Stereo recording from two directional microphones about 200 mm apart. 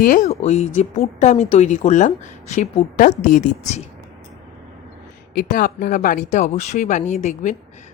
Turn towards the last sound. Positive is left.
turn(degrees=35)  # may be behind; listen again after turning